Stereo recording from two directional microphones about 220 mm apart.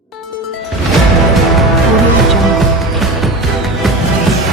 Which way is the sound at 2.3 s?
Centre (ahead or behind).